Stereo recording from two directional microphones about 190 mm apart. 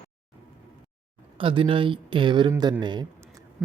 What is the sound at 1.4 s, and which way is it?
Speech, 30° right (ahead or behind).